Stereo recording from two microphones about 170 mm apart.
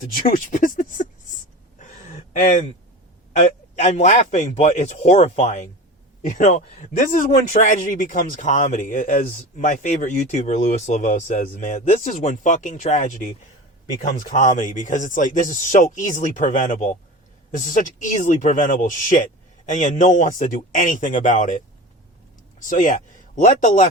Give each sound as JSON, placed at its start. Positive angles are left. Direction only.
{"t": 0.0, "sound": "speech", "side_deg": 55}
{"t": 1.8, "sound": "a sound", "side_deg": 45}
{"t": 3.3, "sound": "speech", "side_deg": 45}
{"t": 22.6, "sound": "speech", "side_deg": 50}